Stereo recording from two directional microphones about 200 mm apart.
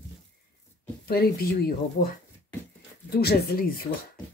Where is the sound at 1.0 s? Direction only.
50° left (ahead or behind).